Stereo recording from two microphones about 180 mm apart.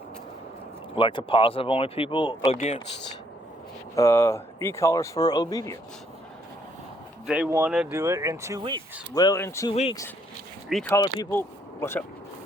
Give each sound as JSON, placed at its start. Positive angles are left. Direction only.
{"t": 0.9, "sound": "speech", "side_deg": 30}
{"t": 3.9, "sound": "speech", "side_deg": 15}
{"t": 7.3, "sound": "speech", "side_deg": -5}
{"t": 9.1, "sound": "speech", "side_deg": 20}
{"t": 10.8, "sound": "speech", "side_deg": 20}